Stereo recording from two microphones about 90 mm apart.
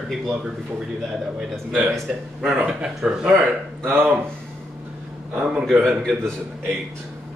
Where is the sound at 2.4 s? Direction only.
10° right (ahead or behind).